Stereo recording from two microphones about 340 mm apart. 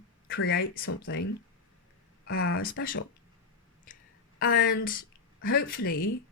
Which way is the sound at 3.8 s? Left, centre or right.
Left.